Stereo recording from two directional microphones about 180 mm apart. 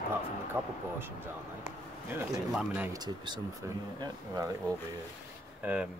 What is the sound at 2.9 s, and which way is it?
Speech, 25° right (ahead or behind).